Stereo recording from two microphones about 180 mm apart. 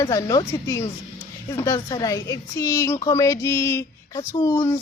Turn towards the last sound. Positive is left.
turn(degrees=20)  # may be behind; listen again after turning